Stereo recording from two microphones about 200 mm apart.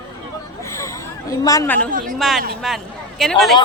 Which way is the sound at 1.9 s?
45° right (ahead or behind).